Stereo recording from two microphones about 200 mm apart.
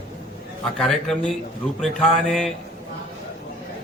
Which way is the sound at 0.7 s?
Centre (ahead or behind).